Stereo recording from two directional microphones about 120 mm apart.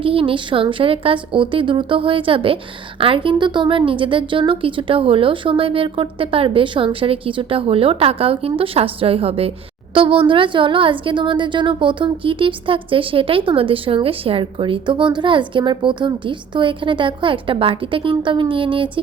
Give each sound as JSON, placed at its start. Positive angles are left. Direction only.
{"t": 0.0, "sound": "a woman's voice", "side_deg": -50}